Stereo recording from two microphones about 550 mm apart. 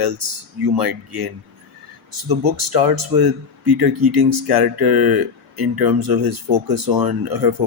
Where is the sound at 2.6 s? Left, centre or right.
Right.